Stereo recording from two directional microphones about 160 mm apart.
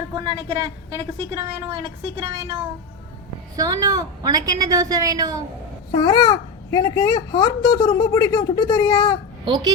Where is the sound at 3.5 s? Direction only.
25° right (ahead or behind).